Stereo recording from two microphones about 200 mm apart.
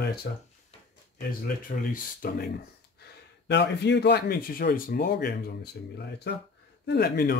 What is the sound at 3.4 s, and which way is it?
Speech, 60° left (ahead or behind).